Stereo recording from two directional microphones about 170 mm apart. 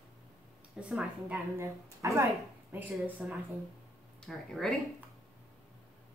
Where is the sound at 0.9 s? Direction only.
5° right (ahead or behind).